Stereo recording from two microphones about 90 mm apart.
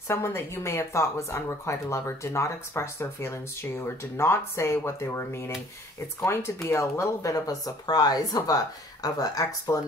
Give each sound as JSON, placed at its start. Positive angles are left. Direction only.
{"t": 0.1, "sound": "speech", "side_deg": 30}